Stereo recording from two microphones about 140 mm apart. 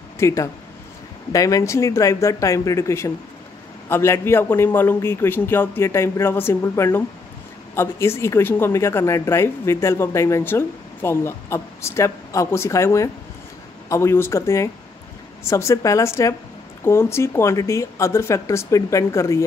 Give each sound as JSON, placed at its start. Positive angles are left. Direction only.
{"t": 0.2, "sound": "a man's voice", "side_deg": 20}